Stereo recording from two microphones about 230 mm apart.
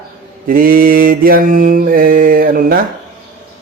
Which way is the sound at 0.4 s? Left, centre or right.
Right.